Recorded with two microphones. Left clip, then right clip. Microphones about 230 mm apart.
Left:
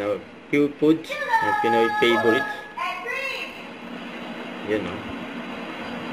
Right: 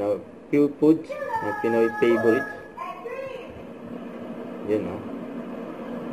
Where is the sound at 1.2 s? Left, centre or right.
Left.